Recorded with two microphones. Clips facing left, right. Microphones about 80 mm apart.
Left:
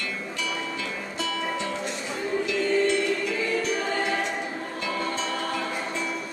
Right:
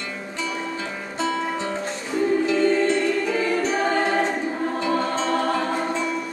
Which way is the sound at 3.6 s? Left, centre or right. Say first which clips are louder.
Right 5 dB; right.